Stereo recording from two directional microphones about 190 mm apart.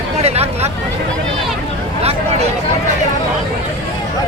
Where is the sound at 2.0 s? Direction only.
35° right (ahead or behind).